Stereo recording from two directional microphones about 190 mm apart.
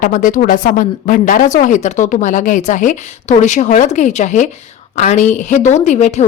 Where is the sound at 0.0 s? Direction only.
45° left (ahead or behind).